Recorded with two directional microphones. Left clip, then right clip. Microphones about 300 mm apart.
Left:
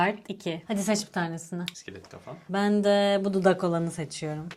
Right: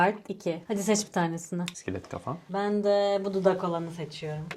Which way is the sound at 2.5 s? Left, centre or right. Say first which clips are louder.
Left 2 dB; left.